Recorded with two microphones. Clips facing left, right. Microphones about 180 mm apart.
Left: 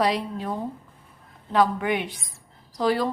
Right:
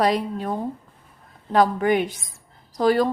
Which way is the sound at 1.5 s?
40° right (ahead or behind).